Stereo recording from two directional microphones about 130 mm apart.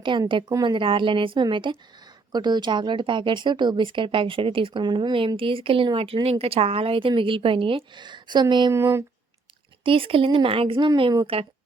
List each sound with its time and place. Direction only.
0.0 s speech: 40° right (ahead or behind)
8.7 s speech: 20° right (ahead or behind)
9.8 s speech: 45° right (ahead or behind)